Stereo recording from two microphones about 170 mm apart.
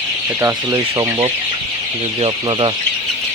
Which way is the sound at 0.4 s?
20° right (ahead or behind).